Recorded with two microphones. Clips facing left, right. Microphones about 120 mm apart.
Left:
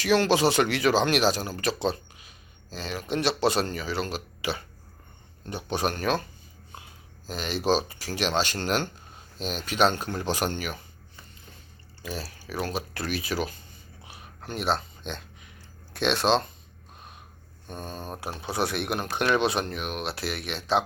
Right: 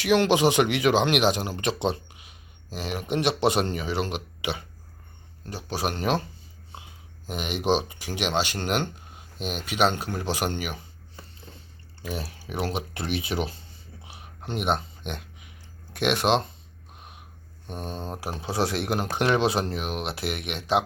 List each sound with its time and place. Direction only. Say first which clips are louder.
0.0 s speech: right 1 dB; 15° right (ahead or behind)
5.5 s speech: left 1 dB; centre (ahead or behind)
5.9 s speech: right 1 dB; 20° right (ahead or behind)
7.3 s speech: even; 20° right (ahead or behind)
12.1 s speech: right 1 dB; 20° right (ahead or behind)
14.1 s a sound: right 3 dB; 20° right (ahead or behind)
16.0 s speech: right 1 dB; 15° right (ahead or behind)
17.0 s a sound: even; 15° right (ahead or behind)
17.7 s speech: right 2 dB; 25° right (ahead or behind)